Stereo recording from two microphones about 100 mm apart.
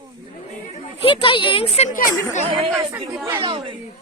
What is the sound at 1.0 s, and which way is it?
Speech, 60° left (ahead or behind).